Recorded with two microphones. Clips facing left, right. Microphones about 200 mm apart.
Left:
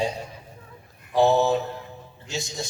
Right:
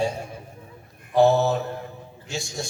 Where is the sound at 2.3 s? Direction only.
20° left (ahead or behind).